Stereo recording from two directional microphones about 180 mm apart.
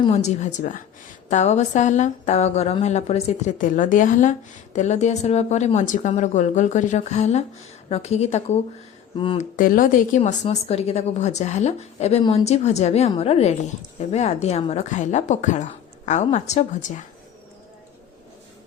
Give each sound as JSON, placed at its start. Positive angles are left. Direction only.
{"t": 0.3, "sound": "speech", "side_deg": 40}
{"t": 9.6, "sound": "speech", "side_deg": 50}
{"t": 10.2, "sound": "speech", "side_deg": 35}